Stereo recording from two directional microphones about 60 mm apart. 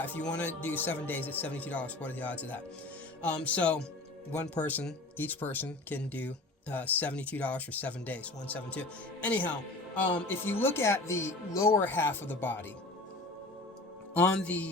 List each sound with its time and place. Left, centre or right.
0.3 s speech: left
9.9 s speech: left
11.8 s speech: left
14.4 s speech: left